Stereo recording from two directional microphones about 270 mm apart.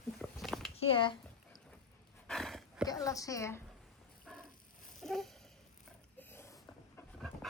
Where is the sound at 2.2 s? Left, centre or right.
Centre.